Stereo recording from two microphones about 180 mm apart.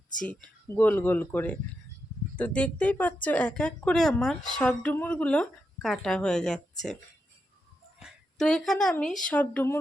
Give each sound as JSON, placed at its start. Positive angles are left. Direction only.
{"t": 0.3, "sound": "speech", "side_deg": 10}
{"t": 7.9, "sound": "a woman's voice", "side_deg": 0}